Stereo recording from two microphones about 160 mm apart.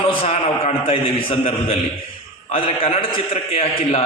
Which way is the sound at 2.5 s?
35° left (ahead or behind).